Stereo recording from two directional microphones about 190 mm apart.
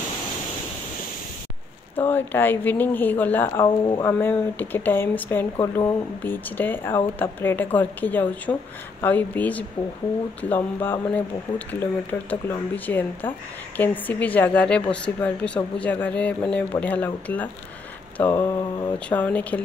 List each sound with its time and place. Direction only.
2.0 s a woman's voice: 10° left (ahead or behind)
18.1 s mantra: 10° left (ahead or behind)
19.0 s a woman's voice: 10° left (ahead or behind)